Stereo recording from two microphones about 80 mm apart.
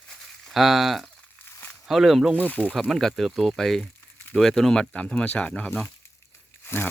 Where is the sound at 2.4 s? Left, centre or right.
Centre.